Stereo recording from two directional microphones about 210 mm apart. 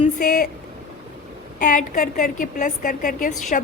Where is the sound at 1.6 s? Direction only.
40° left (ahead or behind).